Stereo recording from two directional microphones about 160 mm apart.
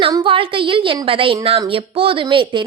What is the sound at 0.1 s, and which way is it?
A woman's voice, 30° right (ahead or behind).